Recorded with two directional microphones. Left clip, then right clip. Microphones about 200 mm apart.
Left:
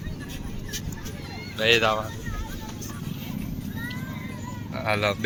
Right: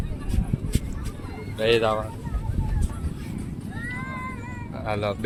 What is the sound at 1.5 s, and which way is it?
Speech, 25° right (ahead or behind).